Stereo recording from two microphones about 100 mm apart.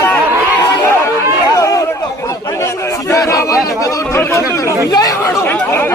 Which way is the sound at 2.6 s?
30° left (ahead or behind).